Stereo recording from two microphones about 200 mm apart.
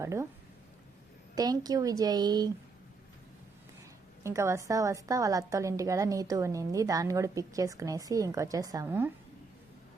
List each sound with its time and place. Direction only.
0.0 s a woman's voice: 15° right (ahead or behind)
1.4 s speech: 20° right (ahead or behind)
4.2 s a woman's voice: 15° right (ahead or behind)